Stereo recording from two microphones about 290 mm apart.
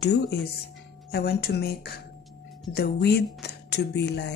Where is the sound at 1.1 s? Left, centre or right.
Left.